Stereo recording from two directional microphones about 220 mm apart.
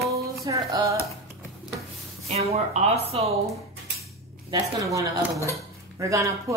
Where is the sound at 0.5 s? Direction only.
15° right (ahead or behind).